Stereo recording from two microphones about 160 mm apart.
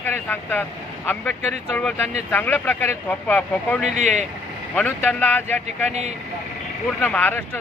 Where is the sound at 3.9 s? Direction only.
45° right (ahead or behind).